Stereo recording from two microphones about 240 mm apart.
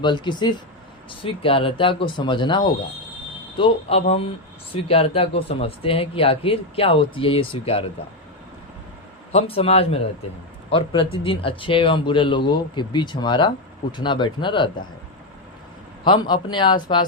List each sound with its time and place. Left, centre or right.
0.0 s speech: centre
9.3 s speech: left
16.0 s speech: centre